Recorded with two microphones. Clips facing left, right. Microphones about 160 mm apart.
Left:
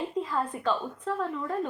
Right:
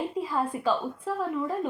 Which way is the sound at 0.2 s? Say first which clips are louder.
Even; 10° right (ahead or behind).